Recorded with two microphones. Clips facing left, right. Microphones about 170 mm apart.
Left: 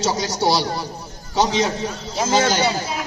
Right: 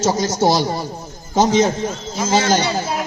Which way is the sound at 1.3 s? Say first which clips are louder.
Right 4 dB; 45° right (ahead or behind).